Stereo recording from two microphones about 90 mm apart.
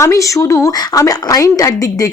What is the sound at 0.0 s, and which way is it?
Speech, 35° left (ahead or behind).